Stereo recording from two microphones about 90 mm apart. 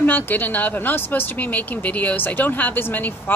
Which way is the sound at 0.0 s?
20° left (ahead or behind).